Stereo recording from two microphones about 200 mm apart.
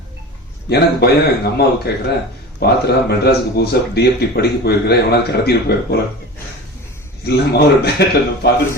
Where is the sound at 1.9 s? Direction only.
55° left (ahead or behind).